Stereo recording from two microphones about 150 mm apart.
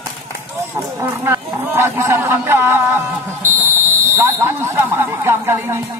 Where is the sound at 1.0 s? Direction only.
15° right (ahead or behind).